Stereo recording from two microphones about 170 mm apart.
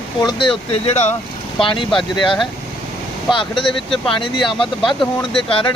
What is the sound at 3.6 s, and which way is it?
Speech, centre (ahead or behind).